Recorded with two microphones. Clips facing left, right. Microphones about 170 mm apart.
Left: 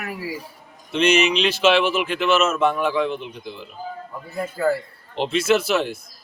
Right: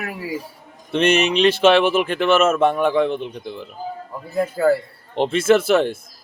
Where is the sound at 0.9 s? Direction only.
55° right (ahead or behind).